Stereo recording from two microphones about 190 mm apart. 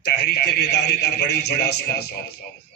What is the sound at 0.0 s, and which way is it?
A man's voice, 60° left (ahead or behind).